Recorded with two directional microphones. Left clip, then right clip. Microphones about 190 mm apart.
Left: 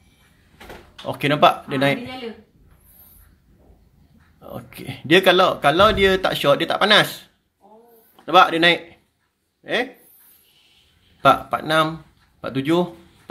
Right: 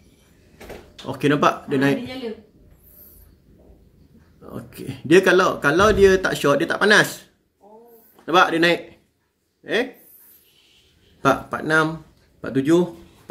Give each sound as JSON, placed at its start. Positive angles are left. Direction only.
{"t": 1.0, "sound": "speech", "side_deg": 20}
{"t": 4.4, "sound": "speech", "side_deg": 15}
{"t": 8.3, "sound": "speech", "side_deg": 20}
{"t": 11.2, "sound": "speech", "side_deg": 20}